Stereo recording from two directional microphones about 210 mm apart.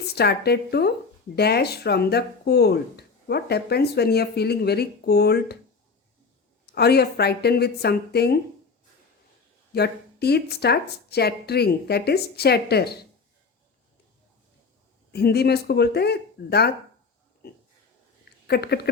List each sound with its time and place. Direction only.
0.1 s speech: 50° left (ahead or behind)
6.7 s speech: 50° left (ahead or behind)
9.7 s speech: 50° left (ahead or behind)
15.1 s speech: 50° left (ahead or behind)
18.4 s speech: 50° left (ahead or behind)